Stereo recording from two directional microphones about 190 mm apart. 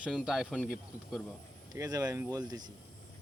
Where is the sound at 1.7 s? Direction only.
20° right (ahead or behind).